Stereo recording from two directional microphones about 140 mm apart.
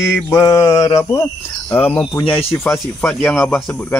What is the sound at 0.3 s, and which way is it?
Speech, 20° left (ahead or behind).